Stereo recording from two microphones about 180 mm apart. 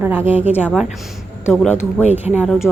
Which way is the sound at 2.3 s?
5° right (ahead or behind).